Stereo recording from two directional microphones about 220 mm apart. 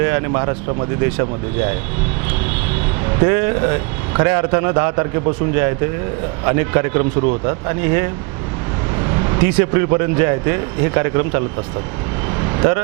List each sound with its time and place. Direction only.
0.1 s a man's voice: 25° right (ahead or behind)
3.2 s a man's voice: 20° right (ahead or behind)
6.4 s a man's voice: 20° right (ahead or behind)
9.0 s vehicle: 25° right (ahead or behind)
9.6 s a man's voice: 20° right (ahead or behind)
12.4 s vehicle: 20° right (ahead or behind)